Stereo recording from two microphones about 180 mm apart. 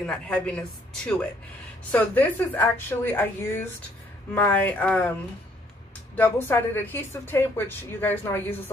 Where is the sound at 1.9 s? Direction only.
10° left (ahead or behind).